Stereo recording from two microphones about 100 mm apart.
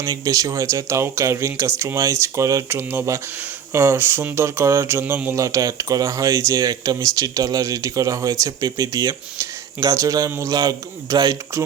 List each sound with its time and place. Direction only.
0.0 s speech: 35° right (ahead or behind)
5.4 s speech: 35° right (ahead or behind)